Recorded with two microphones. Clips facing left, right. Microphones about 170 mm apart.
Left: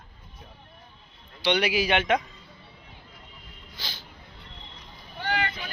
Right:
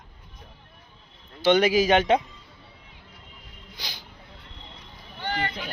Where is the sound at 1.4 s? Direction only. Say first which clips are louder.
Right 5 dB; 45° right (ahead or behind).